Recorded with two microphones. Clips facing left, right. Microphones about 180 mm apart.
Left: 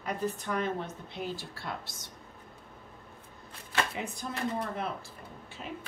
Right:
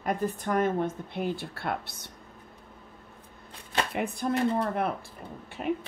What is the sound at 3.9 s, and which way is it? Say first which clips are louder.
Speech: right 9 dB; 60° right (ahead or behind).